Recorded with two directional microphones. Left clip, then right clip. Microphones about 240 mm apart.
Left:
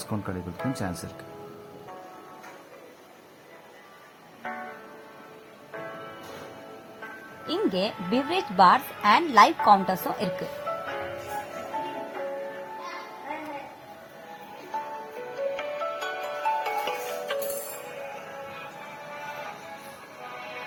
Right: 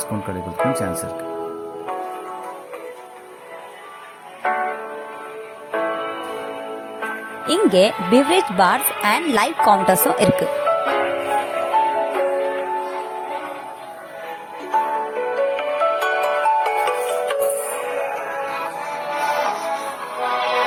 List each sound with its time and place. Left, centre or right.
4.4 s music: right
5.7 s music: right
7.0 s speech: right
9.6 s music: right
14.7 s music: right